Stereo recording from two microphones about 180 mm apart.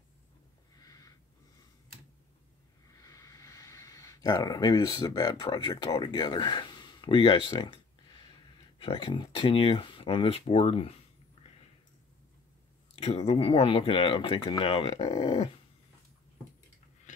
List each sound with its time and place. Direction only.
0.8 s snort: 20° left (ahead or behind)
3.0 s speech: 20° left (ahead or behind)
12.9 s speech: 35° left (ahead or behind)